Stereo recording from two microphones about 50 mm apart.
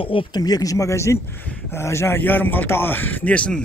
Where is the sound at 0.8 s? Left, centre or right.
Left.